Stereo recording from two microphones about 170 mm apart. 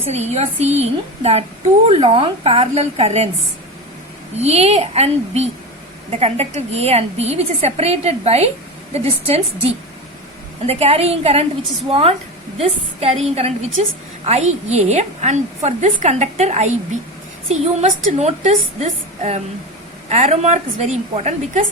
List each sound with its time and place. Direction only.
0.0 s a woman's voice: 40° right (ahead or behind)
4.4 s a woman's voice: 40° right (ahead or behind)
10.7 s a woman's voice: 35° right (ahead or behind)